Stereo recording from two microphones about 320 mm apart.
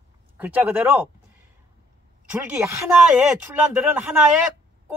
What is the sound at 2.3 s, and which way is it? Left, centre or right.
Speech, centre.